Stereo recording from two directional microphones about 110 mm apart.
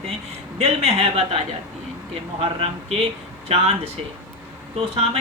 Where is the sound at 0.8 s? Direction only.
65° right (ahead or behind).